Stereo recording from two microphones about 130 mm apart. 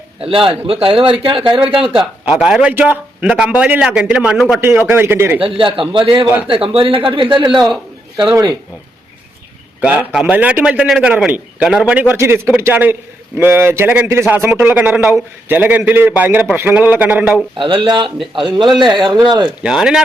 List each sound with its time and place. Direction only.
0.2 s a man's voice: 45° right (ahead or behind)
2.2 s a man's voice: 5° right (ahead or behind)
4.6 s a man's voice: 20° right (ahead or behind)
5.4 s a man's voice: 40° right (ahead or behind)
9.8 s a man's voice: 10° right (ahead or behind)
17.6 s speech: 40° right (ahead or behind)
19.6 s speech: 5° right (ahead or behind)